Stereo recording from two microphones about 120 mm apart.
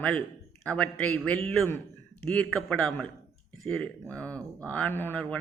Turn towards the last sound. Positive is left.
turn(degrees=10)  # may be behind; listen again after turning